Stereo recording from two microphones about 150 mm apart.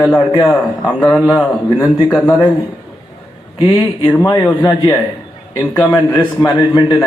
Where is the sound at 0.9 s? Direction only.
5° left (ahead or behind).